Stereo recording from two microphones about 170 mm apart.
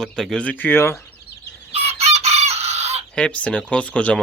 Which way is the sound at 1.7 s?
40° right (ahead or behind).